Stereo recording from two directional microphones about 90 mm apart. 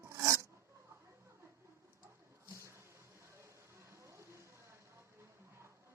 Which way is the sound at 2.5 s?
30° right (ahead or behind).